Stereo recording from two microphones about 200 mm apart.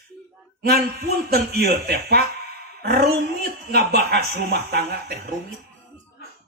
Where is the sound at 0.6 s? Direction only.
50° right (ahead or behind).